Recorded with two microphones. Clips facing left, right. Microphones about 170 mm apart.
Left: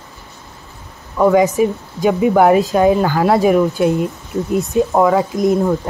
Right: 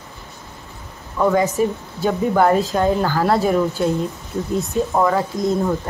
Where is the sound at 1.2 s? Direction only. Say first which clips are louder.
Left 5 dB; 15° left (ahead or behind).